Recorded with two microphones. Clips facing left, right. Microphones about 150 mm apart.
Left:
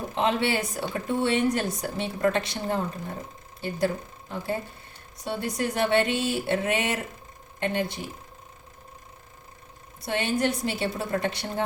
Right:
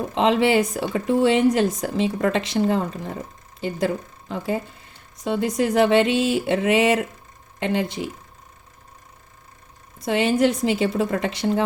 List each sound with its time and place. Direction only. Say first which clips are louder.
0.1 s speech: right 7 dB; 90° right
10.1 s speech: right 7 dB; 90° right